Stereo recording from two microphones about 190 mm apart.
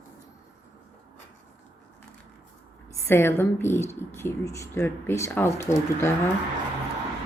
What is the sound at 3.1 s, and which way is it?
Speech, 10° left (ahead or behind).